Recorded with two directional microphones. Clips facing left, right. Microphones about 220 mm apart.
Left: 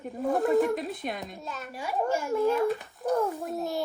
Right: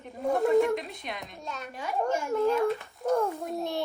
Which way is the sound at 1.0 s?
45° left (ahead or behind).